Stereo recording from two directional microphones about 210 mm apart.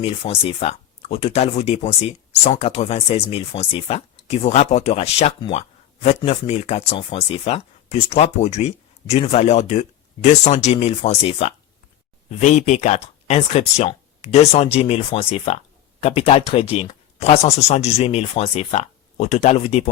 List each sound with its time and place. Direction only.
0.0 s speech: 30° left (ahead or behind)